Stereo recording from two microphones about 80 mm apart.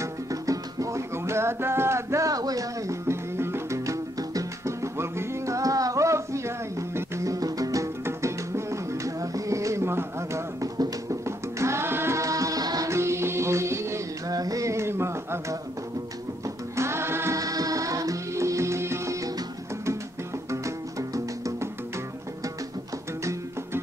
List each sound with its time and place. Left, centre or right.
0.0 s music: right
3.1 s music: right
4.9 s a sound: right
7.0 s music: right
8.0 s music: right
12.9 s music: right
14.3 s a sound: right
16.4 s music: right
17.4 s music: right
20.6 s music: right